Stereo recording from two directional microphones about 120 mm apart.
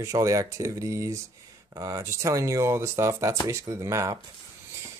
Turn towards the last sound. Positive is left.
turn(degrees=-25)  # may be behind; listen again after turning